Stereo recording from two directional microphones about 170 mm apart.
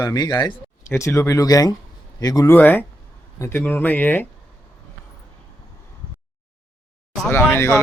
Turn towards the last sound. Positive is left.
turn(degrees=10)  # may be behind; listen again after turning